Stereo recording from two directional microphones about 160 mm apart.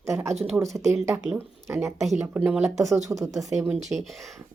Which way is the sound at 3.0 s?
20° right (ahead or behind).